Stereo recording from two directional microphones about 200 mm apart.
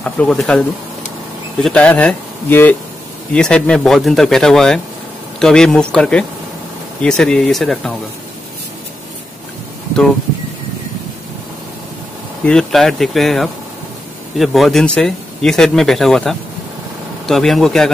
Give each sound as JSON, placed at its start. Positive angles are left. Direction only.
{"t": 0.0, "sound": "speech", "side_deg": 5}
{"t": 12.4, "sound": "speech", "side_deg": 0}